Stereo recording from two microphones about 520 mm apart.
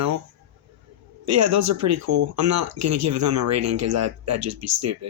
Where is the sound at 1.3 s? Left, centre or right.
Right.